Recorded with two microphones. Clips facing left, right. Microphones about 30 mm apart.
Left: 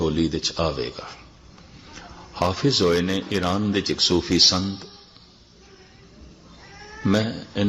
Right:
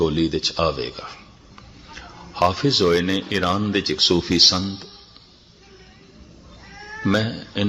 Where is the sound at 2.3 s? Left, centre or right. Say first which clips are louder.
Right 3 dB; centre.